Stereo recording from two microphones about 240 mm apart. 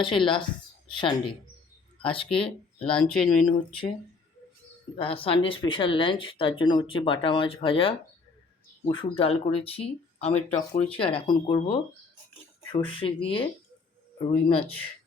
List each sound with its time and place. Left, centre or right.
0.0 s speech: left
2.9 s speech: centre
4.9 s speech: left